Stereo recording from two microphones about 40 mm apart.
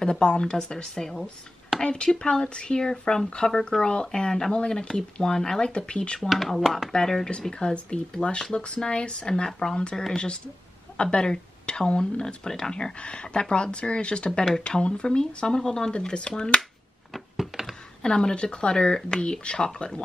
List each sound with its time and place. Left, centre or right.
0.0 s speech: left
1.8 s speech: left
6.2 s speech: centre
6.9 s speech: centre
17.4 s a sound: centre
18.0 s speech: left